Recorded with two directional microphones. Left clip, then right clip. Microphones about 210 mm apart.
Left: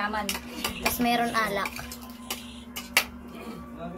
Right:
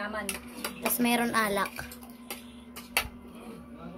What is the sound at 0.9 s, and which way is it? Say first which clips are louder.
Speech: left 1 dB; 50° right (ahead or behind).